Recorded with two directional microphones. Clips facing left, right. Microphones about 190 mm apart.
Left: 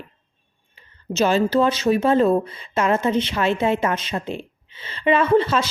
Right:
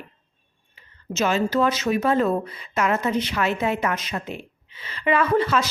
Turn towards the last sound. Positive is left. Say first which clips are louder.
# left 3 dB
turn(degrees=25)  # may be behind; listen again after turning